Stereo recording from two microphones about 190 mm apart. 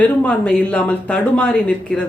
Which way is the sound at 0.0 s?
5° left (ahead or behind).